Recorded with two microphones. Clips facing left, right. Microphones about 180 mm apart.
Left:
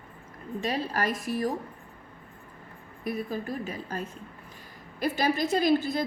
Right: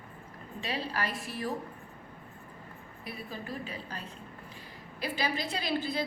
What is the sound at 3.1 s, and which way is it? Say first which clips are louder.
Speech: left 9 dB; 45° left (ahead or behind).